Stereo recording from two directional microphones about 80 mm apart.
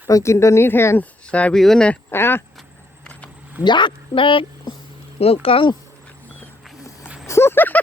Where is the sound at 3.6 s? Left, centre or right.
Left.